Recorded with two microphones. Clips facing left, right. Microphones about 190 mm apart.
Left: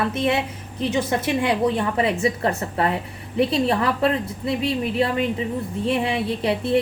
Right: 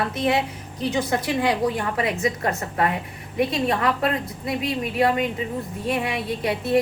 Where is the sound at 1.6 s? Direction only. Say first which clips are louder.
Left 3 dB; 30° left (ahead or behind).